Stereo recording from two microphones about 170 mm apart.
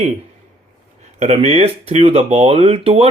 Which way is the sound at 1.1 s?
40° right (ahead or behind).